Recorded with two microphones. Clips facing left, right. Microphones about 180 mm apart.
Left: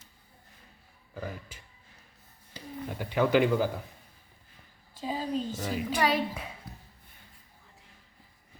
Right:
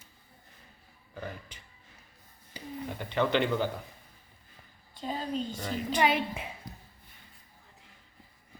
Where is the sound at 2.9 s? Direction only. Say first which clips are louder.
Left 3 dB; 5° left (ahead or behind).